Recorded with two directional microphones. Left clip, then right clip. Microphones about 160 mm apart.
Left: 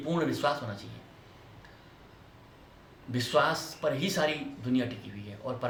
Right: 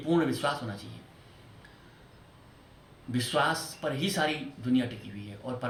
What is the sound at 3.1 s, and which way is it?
Speech, 15° left (ahead or behind).